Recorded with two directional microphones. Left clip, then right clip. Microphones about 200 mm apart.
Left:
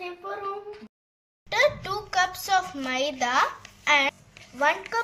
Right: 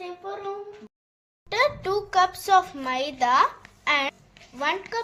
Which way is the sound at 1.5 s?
30° right (ahead or behind).